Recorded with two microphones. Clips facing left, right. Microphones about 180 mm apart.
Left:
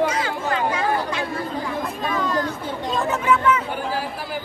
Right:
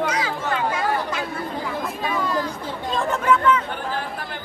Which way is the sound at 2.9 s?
5° left (ahead or behind).